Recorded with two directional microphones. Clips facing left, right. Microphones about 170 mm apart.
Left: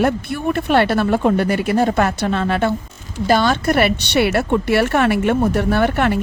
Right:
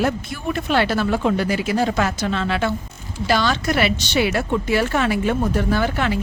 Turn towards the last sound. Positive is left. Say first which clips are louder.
# left 4 dB
turn(degrees=60)  # may be behind; listen again after turning